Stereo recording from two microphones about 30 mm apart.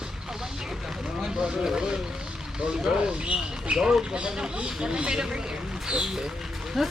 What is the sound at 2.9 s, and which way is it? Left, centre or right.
Speech, right.